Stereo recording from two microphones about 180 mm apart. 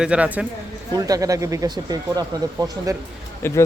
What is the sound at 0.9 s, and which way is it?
Speech, 20° right (ahead or behind).